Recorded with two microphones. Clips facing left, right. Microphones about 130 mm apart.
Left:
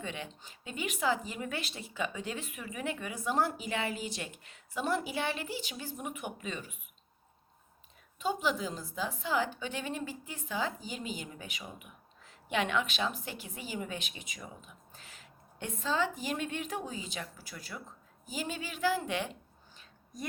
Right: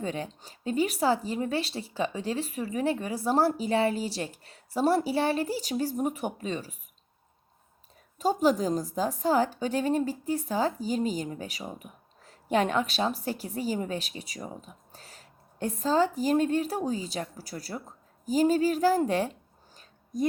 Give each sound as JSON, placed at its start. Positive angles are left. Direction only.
{"t": 0.0, "sound": "a woman's voice", "side_deg": -40}
{"t": 8.2, "sound": "a woman's voice", "side_deg": -40}